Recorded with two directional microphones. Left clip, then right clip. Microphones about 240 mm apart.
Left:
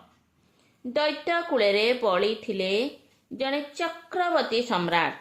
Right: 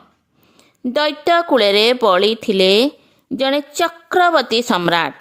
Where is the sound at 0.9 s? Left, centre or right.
Right.